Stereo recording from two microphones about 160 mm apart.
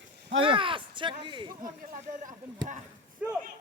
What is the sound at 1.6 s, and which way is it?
Speech, 55° right (ahead or behind).